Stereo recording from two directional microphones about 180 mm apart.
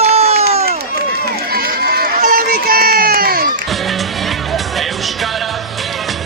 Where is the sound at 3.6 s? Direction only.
Centre (ahead or behind).